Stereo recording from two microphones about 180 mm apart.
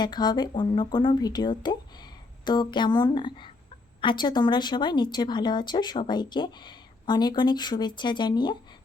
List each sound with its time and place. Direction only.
0.0 s speech: 25° left (ahead or behind)